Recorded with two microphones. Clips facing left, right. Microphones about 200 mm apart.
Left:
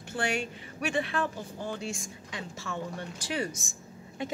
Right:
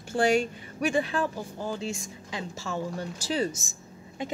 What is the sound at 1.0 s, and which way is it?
A woman's voice, 35° right (ahead or behind).